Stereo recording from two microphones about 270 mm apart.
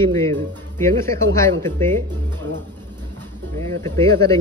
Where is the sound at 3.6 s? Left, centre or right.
Centre.